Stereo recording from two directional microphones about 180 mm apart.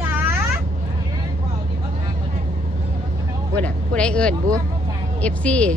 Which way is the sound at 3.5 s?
5° left (ahead or behind).